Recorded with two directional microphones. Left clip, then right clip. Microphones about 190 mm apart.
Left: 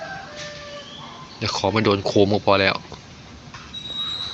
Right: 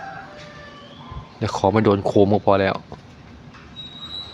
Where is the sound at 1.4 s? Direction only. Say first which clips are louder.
Right 2 dB; 25° right (ahead or behind).